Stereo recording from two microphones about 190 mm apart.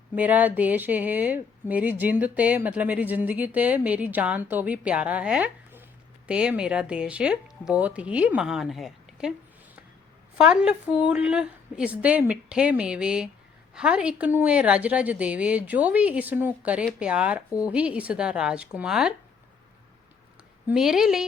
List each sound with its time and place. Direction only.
0.2 s speech: 10° right (ahead or behind)
10.3 s speech: 5° right (ahead or behind)
20.7 s speech: 5° right (ahead or behind)